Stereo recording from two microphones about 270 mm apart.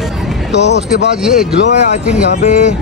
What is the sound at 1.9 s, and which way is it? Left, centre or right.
Speech, left.